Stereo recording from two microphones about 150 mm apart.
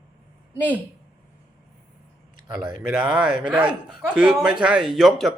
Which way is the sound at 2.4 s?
5° right (ahead or behind).